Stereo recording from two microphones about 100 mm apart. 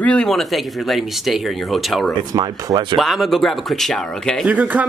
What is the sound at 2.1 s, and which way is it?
Speech, 45° right (ahead or behind).